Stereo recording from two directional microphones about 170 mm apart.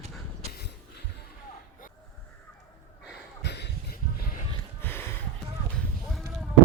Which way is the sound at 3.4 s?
85° left.